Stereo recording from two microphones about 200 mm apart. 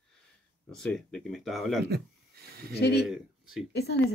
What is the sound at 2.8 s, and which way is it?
Speech, 55° left (ahead or behind).